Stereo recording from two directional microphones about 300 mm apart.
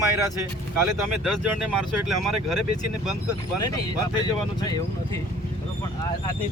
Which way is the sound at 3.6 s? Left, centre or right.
Centre.